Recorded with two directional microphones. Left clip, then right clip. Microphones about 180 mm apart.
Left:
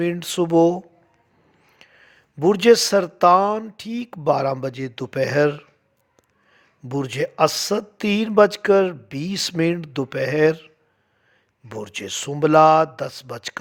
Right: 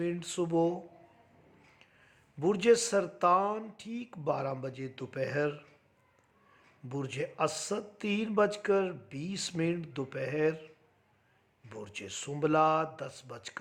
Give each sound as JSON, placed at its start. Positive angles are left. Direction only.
{"t": 0.0, "sound": "speech", "side_deg": 45}
{"t": 1.8, "sound": "speech", "side_deg": 45}
{"t": 11.7, "sound": "speech", "side_deg": 45}